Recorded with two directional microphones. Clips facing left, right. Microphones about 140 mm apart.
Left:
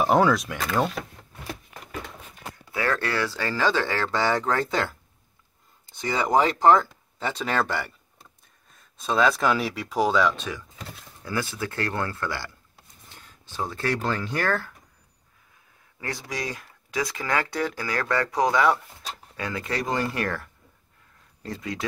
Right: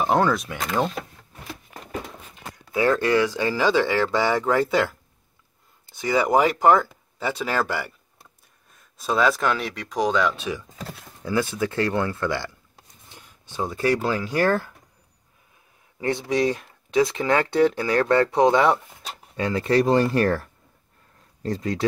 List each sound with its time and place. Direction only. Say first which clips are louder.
0.0 s speech: left 1 dB; 5° left (ahead or behind)
2.7 s speech: right 7 dB; 20° right (ahead or behind)
5.9 s speech: right 3 dB; 5° right (ahead or behind)
9.0 s speech: right 1 dB; centre (ahead or behind)
10.3 s speech: right 4 dB; 10° right (ahead or behind)
16.0 s speech: right 10 dB; 25° right (ahead or behind)